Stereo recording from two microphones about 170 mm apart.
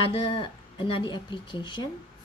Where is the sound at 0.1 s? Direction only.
30° left (ahead or behind).